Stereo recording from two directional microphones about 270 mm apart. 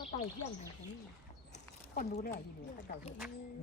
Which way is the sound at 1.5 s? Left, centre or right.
Left.